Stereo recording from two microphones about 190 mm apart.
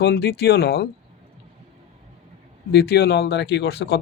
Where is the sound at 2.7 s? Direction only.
60° left (ahead or behind).